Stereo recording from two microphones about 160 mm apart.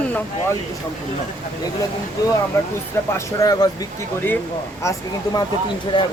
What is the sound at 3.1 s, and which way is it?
Speech, 20° left (ahead or behind).